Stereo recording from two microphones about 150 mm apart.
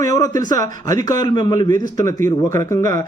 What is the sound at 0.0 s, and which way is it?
A man's voice, 20° left (ahead or behind).